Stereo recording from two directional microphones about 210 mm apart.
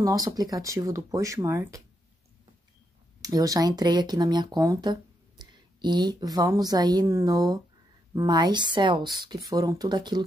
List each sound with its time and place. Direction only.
0.0 s speech: 15° right (ahead or behind)
3.2 s a woman's voice: 15° right (ahead or behind)